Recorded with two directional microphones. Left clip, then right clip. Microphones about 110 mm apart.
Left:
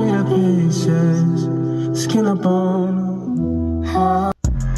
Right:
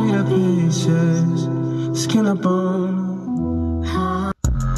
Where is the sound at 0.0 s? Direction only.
15° right (ahead or behind).